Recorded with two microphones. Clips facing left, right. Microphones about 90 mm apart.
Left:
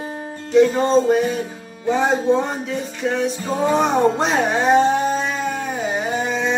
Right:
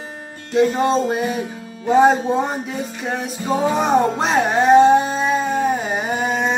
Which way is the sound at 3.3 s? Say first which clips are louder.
Even; 5° right (ahead or behind).